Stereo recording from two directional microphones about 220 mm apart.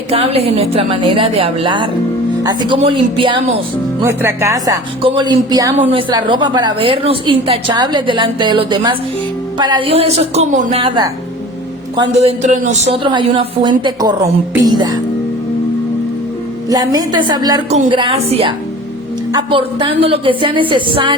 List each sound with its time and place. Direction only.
0.1 s a woman's voice: 25° right (ahead or behind)
4.0 s a woman's voice: 10° right (ahead or behind)
16.6 s a woman's voice: 15° right (ahead or behind)